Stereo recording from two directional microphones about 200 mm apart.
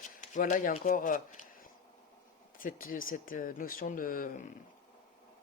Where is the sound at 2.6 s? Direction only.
45° left (ahead or behind).